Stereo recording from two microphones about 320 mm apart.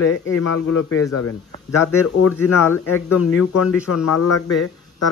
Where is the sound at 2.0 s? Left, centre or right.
Left.